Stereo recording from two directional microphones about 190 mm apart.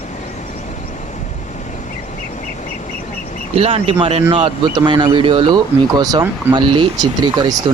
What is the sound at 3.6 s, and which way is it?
Speech, 30° right (ahead or behind).